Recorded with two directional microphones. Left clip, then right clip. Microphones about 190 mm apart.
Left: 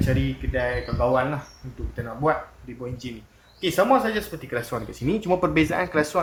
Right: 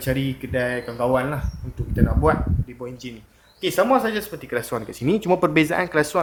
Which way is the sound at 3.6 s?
50° right (ahead or behind).